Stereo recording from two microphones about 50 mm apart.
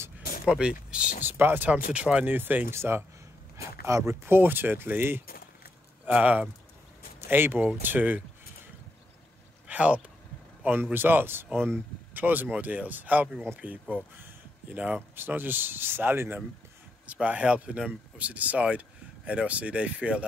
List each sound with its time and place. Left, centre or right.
0.5 s speech: centre
1.2 s speech: right
2.7 s speech: right
3.5 s speech: right
6.1 s speech: right
7.2 s speech: right
7.8 s speech: right
9.7 s speech: right
10.8 s speech: right
15.1 s speech: right
17.0 s speech: right